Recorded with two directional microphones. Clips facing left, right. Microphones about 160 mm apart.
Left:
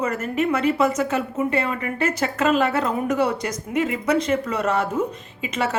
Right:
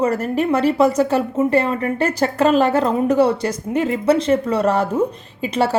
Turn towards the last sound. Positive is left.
turn(degrees=-35)  # may be behind; listen again after turning